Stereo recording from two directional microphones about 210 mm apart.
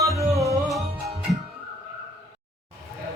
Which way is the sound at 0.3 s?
15° right (ahead or behind).